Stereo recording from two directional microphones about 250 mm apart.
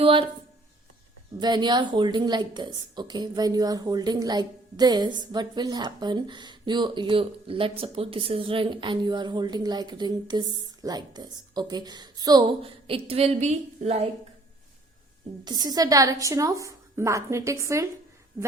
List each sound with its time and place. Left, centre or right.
0.0 s speech: right
1.4 s a woman's voice: centre
15.4 s a woman's voice: centre